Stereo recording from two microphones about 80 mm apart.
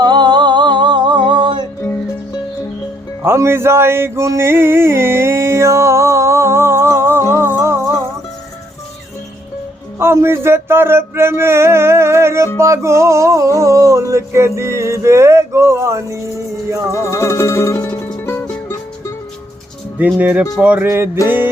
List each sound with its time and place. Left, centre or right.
0.0 s a sound: right
3.2 s music: right
10.0 s music: right
17.1 s music: left
20.1 s speech: right
20.8 s music: right
21.2 s speech: right